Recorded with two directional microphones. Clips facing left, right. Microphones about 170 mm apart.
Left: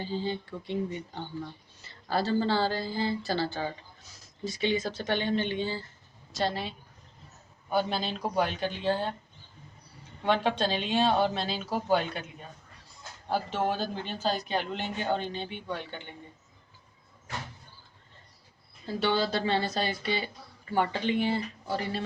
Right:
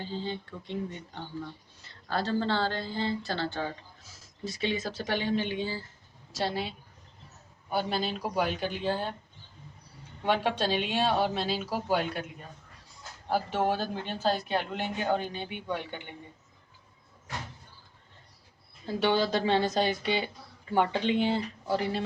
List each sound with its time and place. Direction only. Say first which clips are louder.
0.0 s a woman's voice: left 3 dB; 5° left (ahead or behind); by 9.0 s 10° right (ahead or behind)
10.2 s a woman's voice: left 1 dB; 10° right (ahead or behind)
13.5 s a woman's voice: right 1 dB; 15° right (ahead or behind)
18.9 s a woman's voice: right 2 dB; 15° right (ahead or behind)